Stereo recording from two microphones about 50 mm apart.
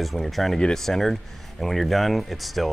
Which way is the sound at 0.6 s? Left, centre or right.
Centre.